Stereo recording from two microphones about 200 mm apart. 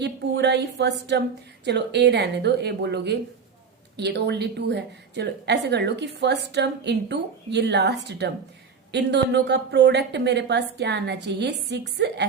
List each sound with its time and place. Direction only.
0.0 s a woman's voice: 60° right (ahead or behind)